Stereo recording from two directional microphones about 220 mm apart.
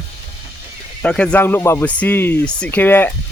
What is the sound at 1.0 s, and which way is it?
Speech, 5° left (ahead or behind).